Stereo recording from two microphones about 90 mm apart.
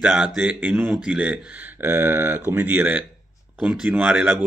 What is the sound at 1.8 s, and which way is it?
Speech, 20° right (ahead or behind).